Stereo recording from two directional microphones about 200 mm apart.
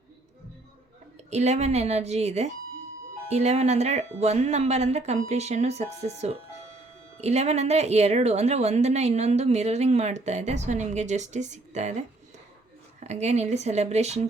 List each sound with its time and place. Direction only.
1.3 s speech: 35° right (ahead or behind)